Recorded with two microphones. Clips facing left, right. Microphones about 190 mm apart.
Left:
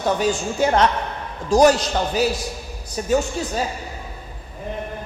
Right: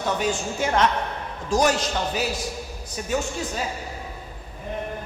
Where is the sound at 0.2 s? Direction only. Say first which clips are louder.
Left 5 dB; 35° left (ahead or behind).